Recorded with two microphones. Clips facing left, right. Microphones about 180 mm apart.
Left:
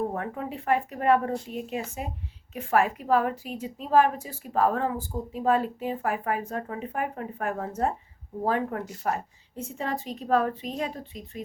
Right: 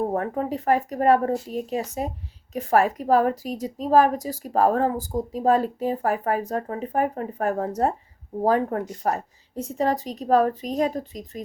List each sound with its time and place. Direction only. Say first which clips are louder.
0.0 s a woman's voice: right 5 dB; 40° right (ahead or behind)